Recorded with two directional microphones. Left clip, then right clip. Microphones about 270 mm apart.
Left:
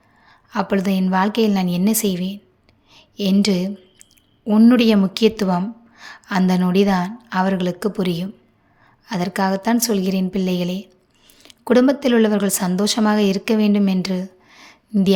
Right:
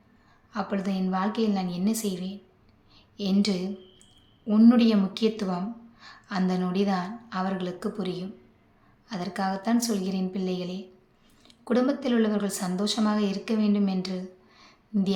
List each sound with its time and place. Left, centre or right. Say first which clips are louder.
0.3 s a woman's voice: left 10 dB; left